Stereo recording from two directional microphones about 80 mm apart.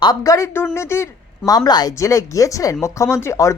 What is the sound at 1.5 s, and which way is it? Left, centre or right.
Speech, left.